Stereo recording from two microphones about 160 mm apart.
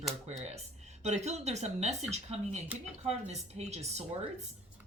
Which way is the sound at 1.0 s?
45° right (ahead or behind).